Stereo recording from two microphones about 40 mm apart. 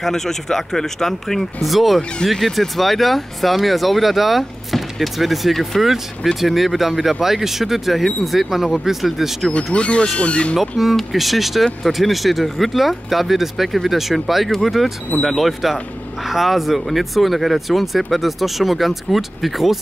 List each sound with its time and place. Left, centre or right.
0.0 s speech: centre
9.8 s speech: left
10.6 s speech: centre